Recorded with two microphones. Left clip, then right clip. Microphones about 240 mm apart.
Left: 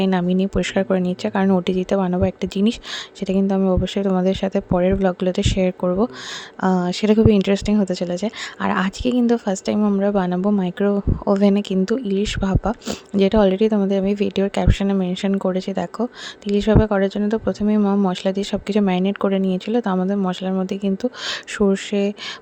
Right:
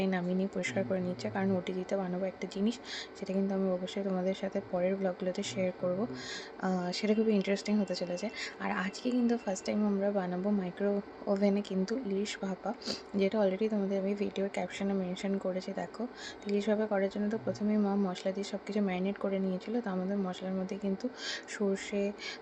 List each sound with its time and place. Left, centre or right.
0.0 s speech: left